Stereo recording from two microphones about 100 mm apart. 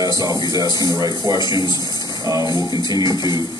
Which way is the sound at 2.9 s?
45° left (ahead or behind).